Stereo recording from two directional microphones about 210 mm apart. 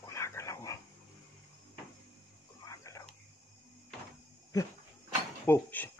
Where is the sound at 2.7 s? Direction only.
15° left (ahead or behind).